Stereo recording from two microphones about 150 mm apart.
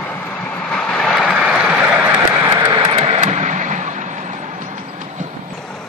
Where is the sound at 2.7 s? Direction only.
35° right (ahead or behind); by 4.3 s 55° right (ahead or behind).